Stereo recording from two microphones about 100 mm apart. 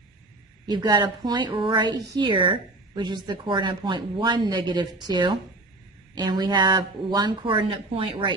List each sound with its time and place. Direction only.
0.7 s a woman's voice: 45° right (ahead or behind)